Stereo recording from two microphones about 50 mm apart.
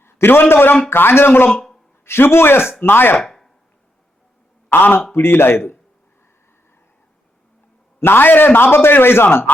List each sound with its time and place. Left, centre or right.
0.0 s a man's voice: left
3.2 s a sound: centre
4.7 s a man's voice: left
7.9 s a man's voice: left